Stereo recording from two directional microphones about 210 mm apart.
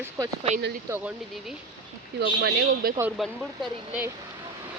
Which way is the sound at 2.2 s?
55° right (ahead or behind).